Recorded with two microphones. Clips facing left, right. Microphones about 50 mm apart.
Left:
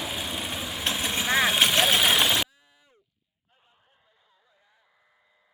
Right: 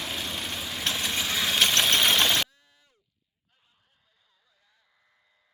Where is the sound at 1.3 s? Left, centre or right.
Left.